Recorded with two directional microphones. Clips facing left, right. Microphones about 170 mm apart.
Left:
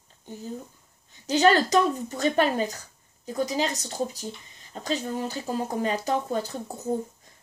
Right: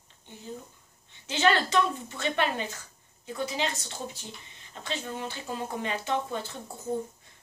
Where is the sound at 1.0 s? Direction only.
40° left (ahead or behind).